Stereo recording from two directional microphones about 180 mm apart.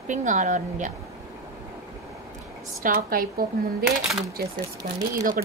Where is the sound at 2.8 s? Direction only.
55° right (ahead or behind).